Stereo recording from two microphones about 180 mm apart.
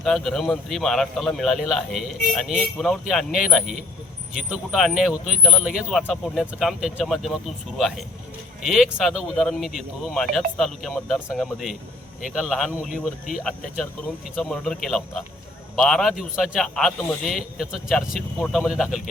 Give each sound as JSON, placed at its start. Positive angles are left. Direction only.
{"t": 0.0, "sound": "a man's voice", "side_deg": 0}
{"t": 12.9, "sound": "speech", "side_deg": 50}
{"t": 13.4, "sound": "a man's voice", "side_deg": 5}